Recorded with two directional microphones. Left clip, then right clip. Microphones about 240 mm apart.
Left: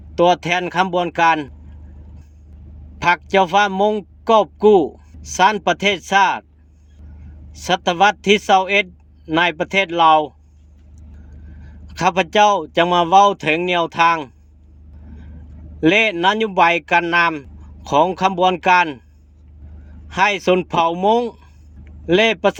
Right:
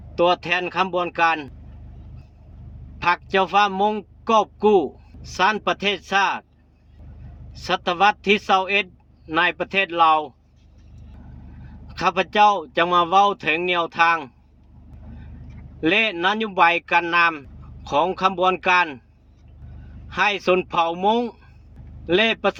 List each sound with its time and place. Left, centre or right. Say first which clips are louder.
0.2 s a man's voice: left 4 dB; left
3.0 s a man's voice: left 5 dB; left
7.5 s a man's voice: left 4 dB; left
11.9 s a man's voice: left 3 dB; left
15.8 s a man's voice: left 5 dB; left
20.1 s a man's voice: left 4 dB; left